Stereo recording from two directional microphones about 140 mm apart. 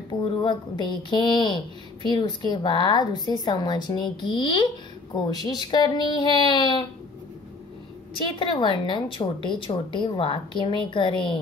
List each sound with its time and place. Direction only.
0.1 s a woman's voice: 35° left (ahead or behind)
8.3 s a woman's voice: 35° left (ahead or behind)